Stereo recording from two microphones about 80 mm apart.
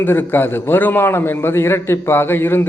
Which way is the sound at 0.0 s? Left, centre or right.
Left.